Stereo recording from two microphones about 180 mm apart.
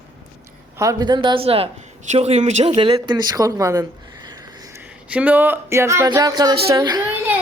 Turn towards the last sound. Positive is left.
turn(degrees=-10)  # may be behind; listen again after turning